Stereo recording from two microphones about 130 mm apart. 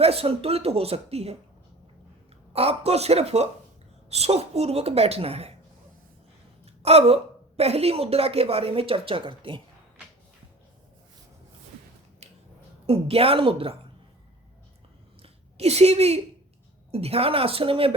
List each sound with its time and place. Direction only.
0.0 s a woman's voice: 50° right (ahead or behind)
2.5 s a woman's voice: 50° right (ahead or behind)
6.8 s a woman's voice: 50° right (ahead or behind)
12.8 s a woman's voice: 50° right (ahead or behind)
15.2 s a sound: 55° right (ahead or behind)
16.9 s a woman's voice: 50° right (ahead or behind)